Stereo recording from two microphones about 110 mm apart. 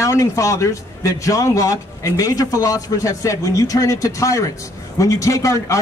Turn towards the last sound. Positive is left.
turn(degrees=30)  # may be behind; listen again after turning